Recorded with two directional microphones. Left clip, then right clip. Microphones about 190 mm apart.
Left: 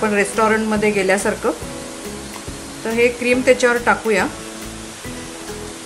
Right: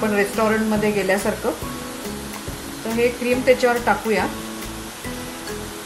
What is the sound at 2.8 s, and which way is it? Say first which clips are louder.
Speech: left 4 dB; 30° left (ahead or behind).